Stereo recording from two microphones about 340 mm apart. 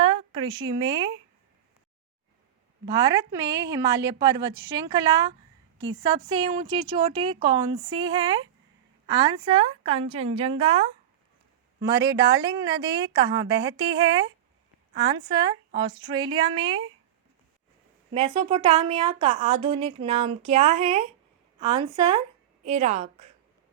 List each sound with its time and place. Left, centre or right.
0.0 s speech: centre
2.8 s speech: centre
5.8 s speech: right; by 16.8 s centre
18.1 s a woman's voice: centre